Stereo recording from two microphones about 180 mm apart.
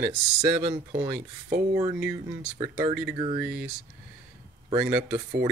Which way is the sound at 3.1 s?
30° right (ahead or behind).